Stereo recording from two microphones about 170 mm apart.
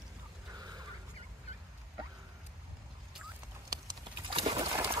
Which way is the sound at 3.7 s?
25° right (ahead or behind).